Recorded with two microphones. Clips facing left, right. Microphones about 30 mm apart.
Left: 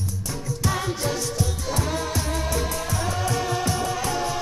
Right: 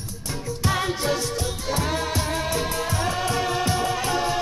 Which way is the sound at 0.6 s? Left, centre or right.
Right.